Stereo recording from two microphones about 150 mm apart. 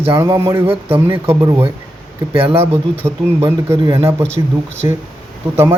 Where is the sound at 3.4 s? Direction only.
30° right (ahead or behind).